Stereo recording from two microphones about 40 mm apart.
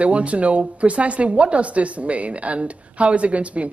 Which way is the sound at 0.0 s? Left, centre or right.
Right.